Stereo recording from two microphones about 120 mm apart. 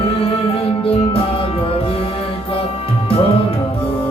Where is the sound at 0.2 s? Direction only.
50° left (ahead or behind).